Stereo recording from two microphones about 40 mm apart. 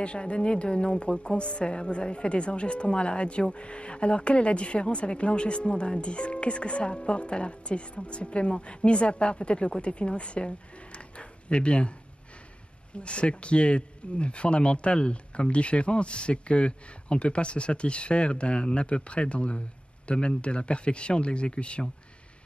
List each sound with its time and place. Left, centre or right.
0.0 s speech: left